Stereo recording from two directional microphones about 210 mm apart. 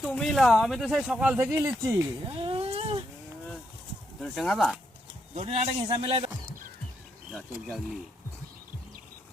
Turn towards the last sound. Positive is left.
turn(degrees=0)  # may be behind; listen again after turning